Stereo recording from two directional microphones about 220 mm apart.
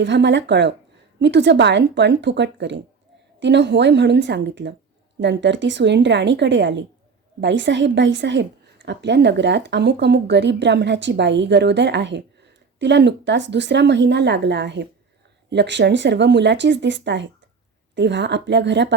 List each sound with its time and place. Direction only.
0.0 s a woman's voice: 55° right (ahead or behind)